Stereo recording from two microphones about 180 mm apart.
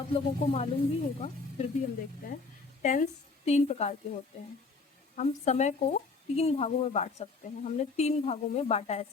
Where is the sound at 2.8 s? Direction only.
40° left (ahead or behind).